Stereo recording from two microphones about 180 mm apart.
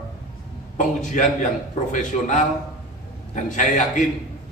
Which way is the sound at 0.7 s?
45° left (ahead or behind).